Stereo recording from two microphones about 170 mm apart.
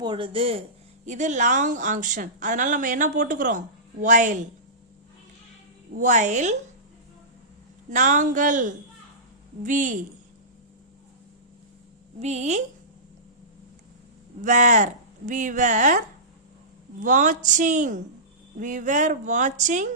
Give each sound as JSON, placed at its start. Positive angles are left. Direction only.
{"t": 0.0, "sound": "speech", "side_deg": -30}
{"t": 1.0, "sound": "a woman's voice", "side_deg": -45}
{"t": 5.9, "sound": "a woman's voice", "side_deg": -45}
{"t": 7.9, "sound": "a woman's voice", "side_deg": -45}
{"t": 12.2, "sound": "speech", "side_deg": -40}
{"t": 14.4, "sound": "a woman's voice", "side_deg": -45}